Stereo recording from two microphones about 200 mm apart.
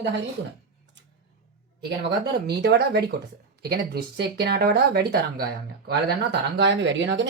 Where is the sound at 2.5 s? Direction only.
55° right (ahead or behind).